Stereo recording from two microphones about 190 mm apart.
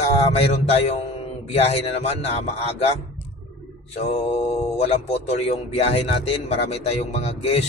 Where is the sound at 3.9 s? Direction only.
35° left (ahead or behind).